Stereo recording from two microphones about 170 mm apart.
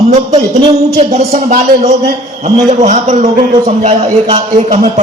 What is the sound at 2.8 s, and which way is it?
A man's voice, 45° right (ahead or behind).